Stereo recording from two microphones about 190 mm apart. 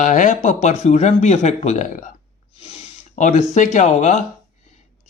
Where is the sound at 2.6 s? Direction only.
30° left (ahead or behind).